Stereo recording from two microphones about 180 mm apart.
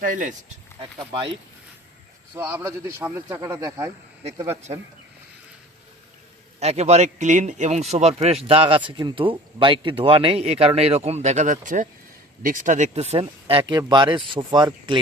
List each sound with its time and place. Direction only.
0.0 s speech: 45° right (ahead or behind)
0.8 s speech: 30° right (ahead or behind)
2.3 s speech: 15° right (ahead or behind)
6.6 s a man's voice: 35° right (ahead or behind)